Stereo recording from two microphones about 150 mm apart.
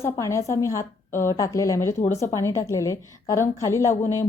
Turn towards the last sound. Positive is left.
turn(degrees=15)  # may be behind; listen again after turning